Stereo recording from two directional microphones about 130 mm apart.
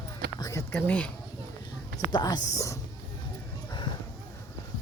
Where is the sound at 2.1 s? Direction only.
30° left (ahead or behind).